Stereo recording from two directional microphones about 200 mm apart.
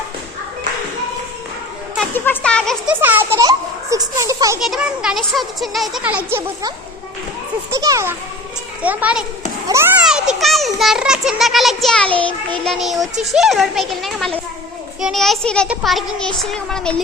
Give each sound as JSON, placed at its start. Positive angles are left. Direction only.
{"t": 2.0, "sound": "a sound", "side_deg": 10}
{"t": 2.9, "sound": "a child's voice", "side_deg": -10}
{"t": 4.6, "sound": "a child's voice", "side_deg": 0}
{"t": 7.8, "sound": "a child's voice", "side_deg": -15}
{"t": 10.0, "sound": "a child's voice", "side_deg": -5}